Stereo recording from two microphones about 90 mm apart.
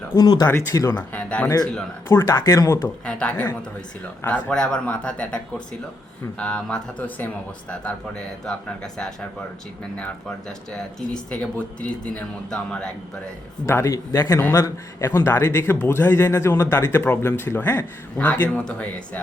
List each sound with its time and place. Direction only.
0.2 s speech: 50° left (ahead or behind)
0.7 s speech: 40° left (ahead or behind)
0.9 s speech: 15° left (ahead or behind)
2.0 s speech: 35° left (ahead or behind)
3.1 s speech: 15° left (ahead or behind)
4.4 s speech: 10° left (ahead or behind)
13.7 s speech: 30° left (ahead or behind); by 19.2 s 15° left (ahead or behind)